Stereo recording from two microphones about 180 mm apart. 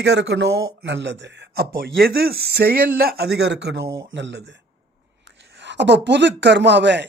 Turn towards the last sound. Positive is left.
turn(degrees=-75)  # may be behind; listen again after turning